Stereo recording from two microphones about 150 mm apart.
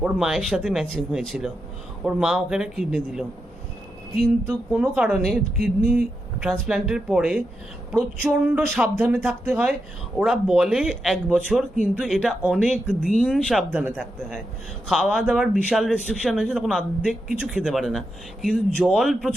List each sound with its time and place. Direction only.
0.0 s a man's voice: 5° right (ahead or behind)